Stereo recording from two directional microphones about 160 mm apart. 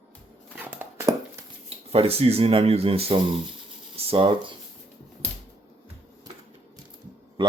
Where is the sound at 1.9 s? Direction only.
35° right (ahead or behind).